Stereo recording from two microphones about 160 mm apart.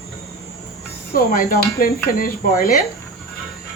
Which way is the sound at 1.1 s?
65° left (ahead or behind).